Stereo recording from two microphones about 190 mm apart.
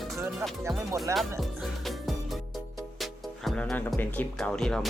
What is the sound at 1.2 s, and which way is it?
Music, centre (ahead or behind).